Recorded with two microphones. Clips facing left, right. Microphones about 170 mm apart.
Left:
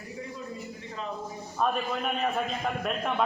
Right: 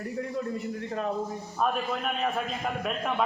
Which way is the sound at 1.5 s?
Centre (ahead or behind).